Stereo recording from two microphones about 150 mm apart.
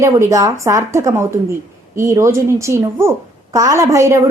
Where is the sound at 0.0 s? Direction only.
20° right (ahead or behind).